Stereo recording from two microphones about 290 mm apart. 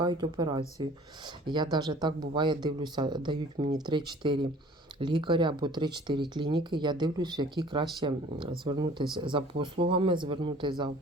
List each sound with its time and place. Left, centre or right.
0.0 s speech: centre